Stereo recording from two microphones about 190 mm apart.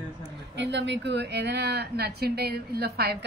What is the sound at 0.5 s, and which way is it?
Speech, 65° right (ahead or behind).